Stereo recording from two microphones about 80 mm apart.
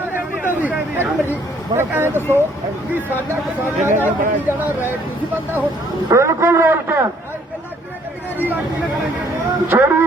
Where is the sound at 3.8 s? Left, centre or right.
Right.